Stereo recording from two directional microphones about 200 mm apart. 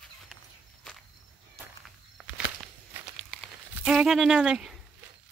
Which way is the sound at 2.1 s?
Centre (ahead or behind).